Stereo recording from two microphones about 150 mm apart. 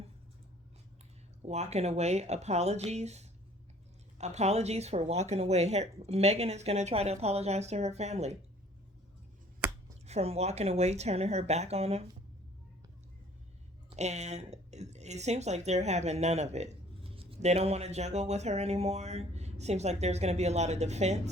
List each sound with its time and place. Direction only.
1.4 s speech: 45° right (ahead or behind)
10.1 s speech: 45° right (ahead or behind)
13.9 s speech: 50° right (ahead or behind)